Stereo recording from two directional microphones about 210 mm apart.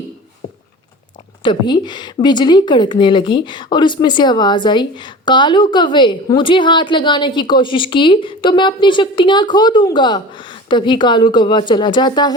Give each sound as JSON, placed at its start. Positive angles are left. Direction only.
{"t": 1.4, "sound": "a woman's voice", "side_deg": 20}